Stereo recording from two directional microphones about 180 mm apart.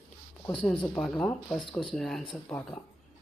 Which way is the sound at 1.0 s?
5° left (ahead or behind).